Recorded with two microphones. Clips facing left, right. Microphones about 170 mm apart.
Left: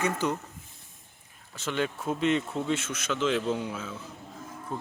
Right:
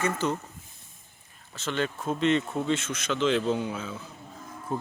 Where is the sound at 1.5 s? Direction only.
10° left (ahead or behind).